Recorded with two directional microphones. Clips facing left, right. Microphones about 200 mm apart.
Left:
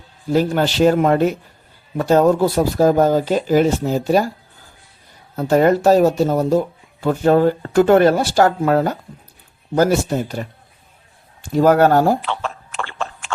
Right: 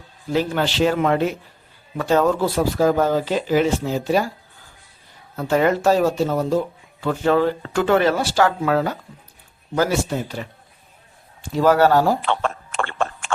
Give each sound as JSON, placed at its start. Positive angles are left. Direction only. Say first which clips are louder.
{"t": 0.3, "sound": "speech", "louder": "left 4 dB", "side_deg": 40}
{"t": 5.4, "sound": "speech", "louder": "left 4 dB", "side_deg": 40}
{"t": 11.5, "sound": "speech", "louder": "left 3 dB", "side_deg": 50}
{"t": 12.2, "sound": "a sound", "louder": "right 3 dB", "side_deg": -50}